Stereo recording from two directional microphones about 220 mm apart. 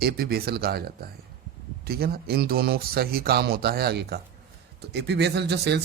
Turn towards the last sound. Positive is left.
turn(degrees=-50)  # may be behind; listen again after turning